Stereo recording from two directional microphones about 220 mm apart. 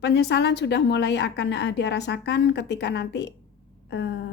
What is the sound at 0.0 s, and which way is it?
A woman's voice, 50° left (ahead or behind).